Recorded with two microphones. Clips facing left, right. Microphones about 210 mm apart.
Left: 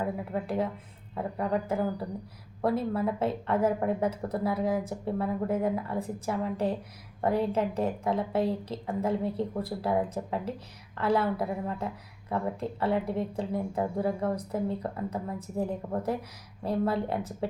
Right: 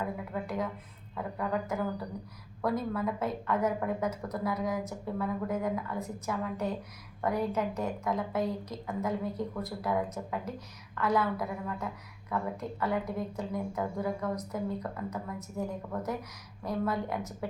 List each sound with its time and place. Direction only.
0.0 s speech: 30° left (ahead or behind)